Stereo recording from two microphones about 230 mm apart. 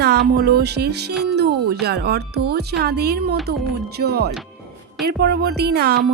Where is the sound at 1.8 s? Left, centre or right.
Right.